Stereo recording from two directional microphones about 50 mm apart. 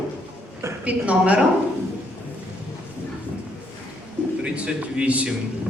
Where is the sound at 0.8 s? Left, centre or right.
Right.